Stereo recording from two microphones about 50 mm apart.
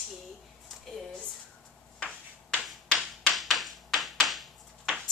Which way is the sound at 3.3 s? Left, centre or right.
Centre.